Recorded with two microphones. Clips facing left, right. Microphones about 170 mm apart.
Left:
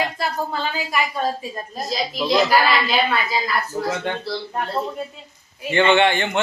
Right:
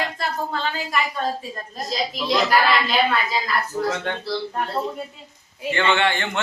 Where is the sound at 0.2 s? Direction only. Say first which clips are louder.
Left 1 dB; 5° left (ahead or behind).